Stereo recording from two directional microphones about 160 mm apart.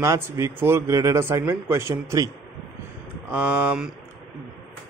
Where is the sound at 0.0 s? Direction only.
15° right (ahead or behind).